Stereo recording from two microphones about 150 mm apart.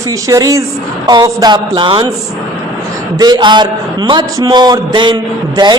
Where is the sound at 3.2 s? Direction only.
30° right (ahead or behind).